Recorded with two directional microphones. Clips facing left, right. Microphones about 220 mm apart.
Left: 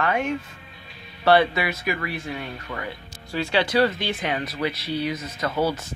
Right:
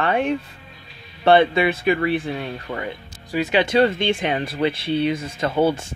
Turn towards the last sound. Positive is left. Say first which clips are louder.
# right 5 dB
turn(degrees=-25)  # may be behind; listen again after turning